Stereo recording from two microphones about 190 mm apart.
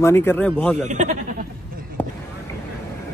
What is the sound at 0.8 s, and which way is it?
Speech, 40° right (ahead or behind).